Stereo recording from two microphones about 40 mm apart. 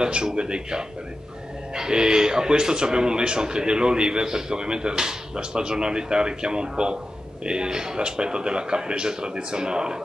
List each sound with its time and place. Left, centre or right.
0.0 s speech: right